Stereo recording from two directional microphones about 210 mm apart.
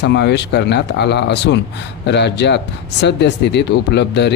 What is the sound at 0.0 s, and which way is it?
Speech, 55° left (ahead or behind).